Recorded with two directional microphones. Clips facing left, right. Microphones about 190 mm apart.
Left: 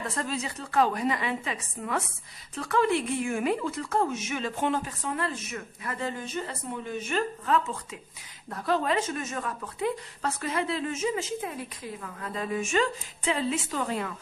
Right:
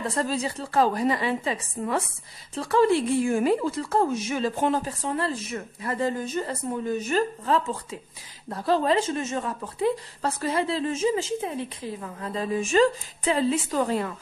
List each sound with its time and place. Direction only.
0.0 s speech: 35° right (ahead or behind)